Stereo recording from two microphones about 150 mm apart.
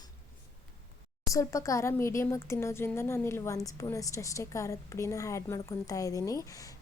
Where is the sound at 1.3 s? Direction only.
20° left (ahead or behind).